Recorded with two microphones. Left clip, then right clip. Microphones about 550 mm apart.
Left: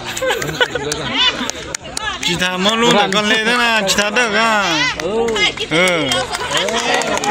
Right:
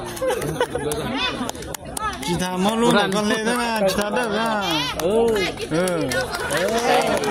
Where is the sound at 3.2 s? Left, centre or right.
Right.